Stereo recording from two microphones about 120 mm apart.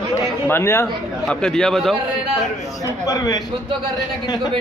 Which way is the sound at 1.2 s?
5° left (ahead or behind).